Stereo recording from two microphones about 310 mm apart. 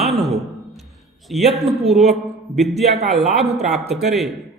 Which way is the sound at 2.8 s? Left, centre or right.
Right.